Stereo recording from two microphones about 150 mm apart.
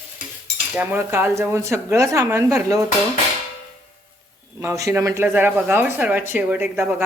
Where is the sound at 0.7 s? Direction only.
10° right (ahead or behind).